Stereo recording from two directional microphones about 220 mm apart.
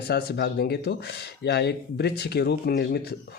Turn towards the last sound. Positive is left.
turn(degrees=50)  # may be behind; listen again after turning